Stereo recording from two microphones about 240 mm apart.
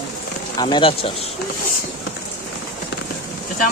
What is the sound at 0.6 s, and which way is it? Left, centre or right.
Speech, left.